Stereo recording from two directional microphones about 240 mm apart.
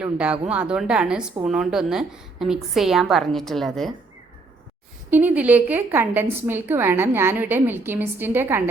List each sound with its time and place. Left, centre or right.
0.0 s a woman's voice: centre
5.1 s a woman's voice: centre